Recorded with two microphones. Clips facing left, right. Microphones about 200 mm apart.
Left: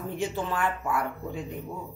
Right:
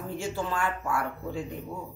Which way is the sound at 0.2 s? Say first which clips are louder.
Left 2 dB; 20° left (ahead or behind).